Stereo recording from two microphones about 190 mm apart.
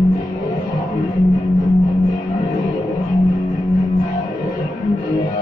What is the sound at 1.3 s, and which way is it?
Music, 15° left (ahead or behind).